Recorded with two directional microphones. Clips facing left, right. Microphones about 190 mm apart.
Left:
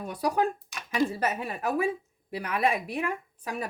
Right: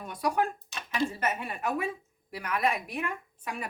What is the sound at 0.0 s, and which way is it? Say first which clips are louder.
A woman's voice: left 2 dB; 35° left (ahead or behind).